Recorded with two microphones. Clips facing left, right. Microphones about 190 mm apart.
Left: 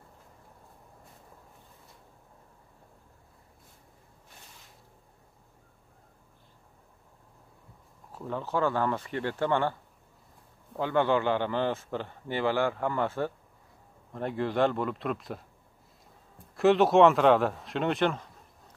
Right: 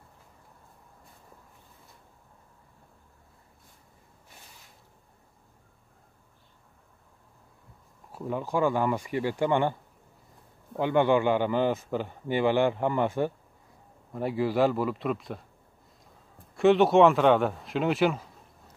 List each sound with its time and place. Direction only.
8.1 s a man's voice: 10° right (ahead or behind)
10.8 s a man's voice: 15° right (ahead or behind); by 15.4 s centre (ahead or behind)
16.5 s speech: centre (ahead or behind)